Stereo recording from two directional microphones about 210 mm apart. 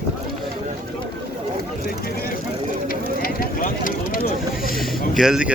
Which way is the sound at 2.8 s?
45° left (ahead or behind).